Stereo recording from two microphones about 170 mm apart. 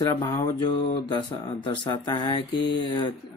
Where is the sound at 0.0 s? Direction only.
20° left (ahead or behind).